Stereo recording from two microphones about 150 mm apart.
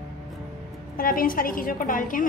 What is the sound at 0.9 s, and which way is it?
A child's voice, 70° left (ahead or behind).